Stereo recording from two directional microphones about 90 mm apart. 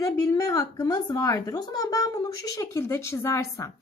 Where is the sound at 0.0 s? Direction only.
35° left (ahead or behind).